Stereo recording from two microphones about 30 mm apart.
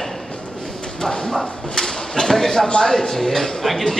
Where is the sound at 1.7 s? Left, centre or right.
Centre.